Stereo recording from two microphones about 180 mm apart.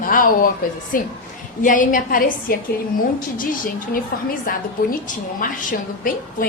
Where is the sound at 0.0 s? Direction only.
50° left (ahead or behind).